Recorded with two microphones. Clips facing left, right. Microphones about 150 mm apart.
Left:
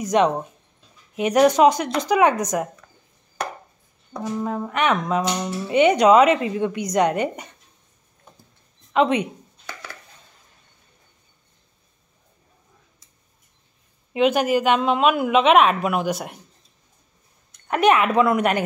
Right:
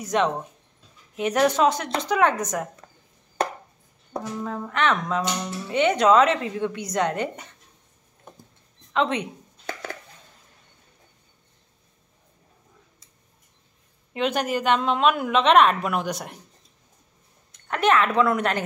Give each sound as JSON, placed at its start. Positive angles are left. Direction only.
{"t": 0.0, "sound": "speech", "side_deg": 20}
{"t": 4.2, "sound": "speech", "side_deg": 15}
{"t": 8.9, "sound": "speech", "side_deg": 15}
{"t": 9.7, "sound": "a sound", "side_deg": -50}
{"t": 14.1, "sound": "speech", "side_deg": 10}
{"t": 17.6, "sound": "speech", "side_deg": 15}